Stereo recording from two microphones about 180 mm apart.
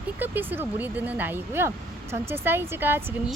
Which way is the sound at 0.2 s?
10° right (ahead or behind).